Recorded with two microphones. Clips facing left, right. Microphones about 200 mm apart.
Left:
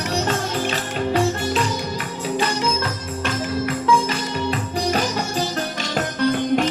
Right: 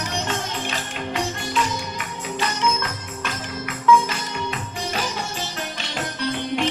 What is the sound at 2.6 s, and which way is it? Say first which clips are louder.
Music: left 2 dB; 30° left (ahead or behind).